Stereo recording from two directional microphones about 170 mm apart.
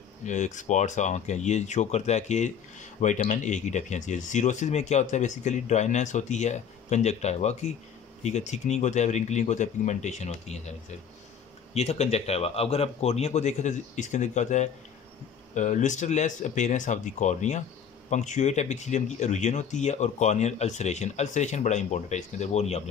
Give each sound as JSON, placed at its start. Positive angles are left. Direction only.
{"t": 0.3, "sound": "speech", "side_deg": 45}
{"t": 11.7, "sound": "speech", "side_deg": 40}